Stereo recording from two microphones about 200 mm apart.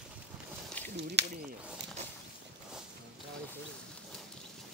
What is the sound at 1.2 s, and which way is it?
Speech, 60° right (ahead or behind).